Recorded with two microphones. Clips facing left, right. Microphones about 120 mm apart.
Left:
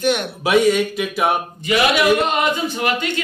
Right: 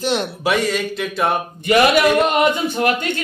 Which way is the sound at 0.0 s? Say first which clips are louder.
Left 1 dB; 30° right (ahead or behind).